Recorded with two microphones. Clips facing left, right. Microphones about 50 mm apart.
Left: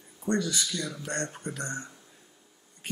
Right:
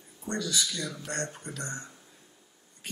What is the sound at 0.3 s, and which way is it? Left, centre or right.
Speech, left.